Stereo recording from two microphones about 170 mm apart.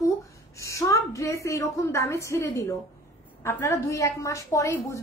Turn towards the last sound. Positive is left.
turn(degrees=20)  # may be behind; listen again after turning